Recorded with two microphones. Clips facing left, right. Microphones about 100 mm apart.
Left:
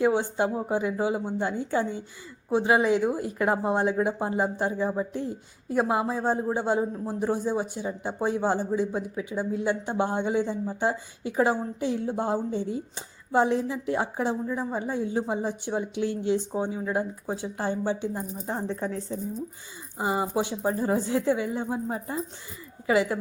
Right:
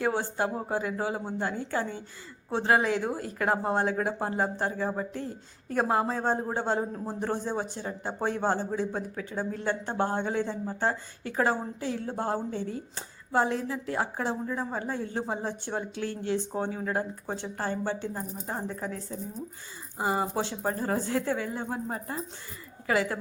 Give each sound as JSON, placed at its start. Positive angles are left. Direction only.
{"t": 0.0, "sound": "speech", "side_deg": 20}
{"t": 18.5, "sound": "speech", "side_deg": 30}
{"t": 20.0, "sound": "speech", "side_deg": 15}